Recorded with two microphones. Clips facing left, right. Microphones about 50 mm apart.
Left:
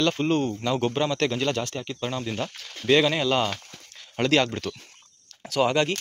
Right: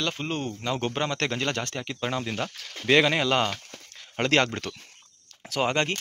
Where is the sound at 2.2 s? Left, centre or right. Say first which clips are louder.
Left 1 dB; right.